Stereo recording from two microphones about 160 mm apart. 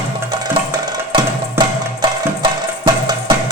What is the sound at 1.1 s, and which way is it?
Music, 25° right (ahead or behind).